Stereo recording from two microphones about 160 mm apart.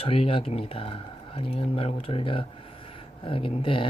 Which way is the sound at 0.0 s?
35° left (ahead or behind).